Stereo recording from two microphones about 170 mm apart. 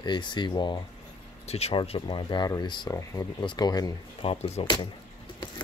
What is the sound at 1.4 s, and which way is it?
Speech, 40° left (ahead or behind).